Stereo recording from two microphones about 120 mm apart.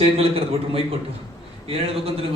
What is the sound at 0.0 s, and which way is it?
A man's voice, 55° right (ahead or behind).